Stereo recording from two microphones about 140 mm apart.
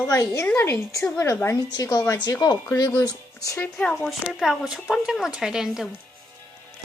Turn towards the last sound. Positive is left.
turn(degrees=0)  # may be behind; listen again after turning